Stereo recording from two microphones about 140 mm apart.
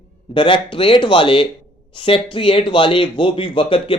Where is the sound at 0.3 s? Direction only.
35° left (ahead or behind).